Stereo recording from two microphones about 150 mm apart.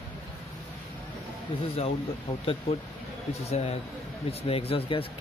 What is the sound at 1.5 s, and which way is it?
Speech, 40° left (ahead or behind).